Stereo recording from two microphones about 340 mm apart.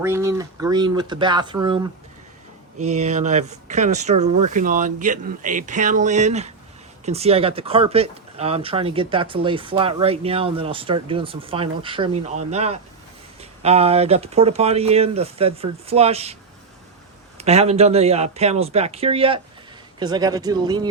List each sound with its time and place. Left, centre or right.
0.0 s speech: centre
2.9 s speech: centre